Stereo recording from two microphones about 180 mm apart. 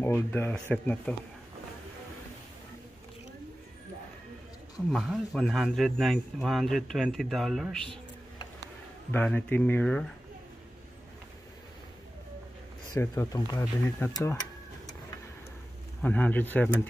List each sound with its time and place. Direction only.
0.0 s speech: 10° left (ahead or behind)
4.8 s speech: centre (ahead or behind)
9.1 s speech: 10° left (ahead or behind)
12.9 s speech: 20° left (ahead or behind)
16.0 s speech: 10° left (ahead or behind)